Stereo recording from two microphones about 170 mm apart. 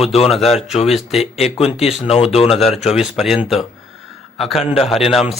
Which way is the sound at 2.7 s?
Centre (ahead or behind).